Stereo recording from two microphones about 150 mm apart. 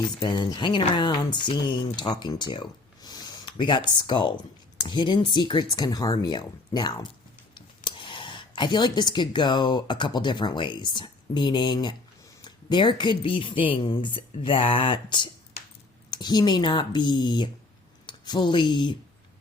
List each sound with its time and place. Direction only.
0.2 s speech: 30° left (ahead or behind)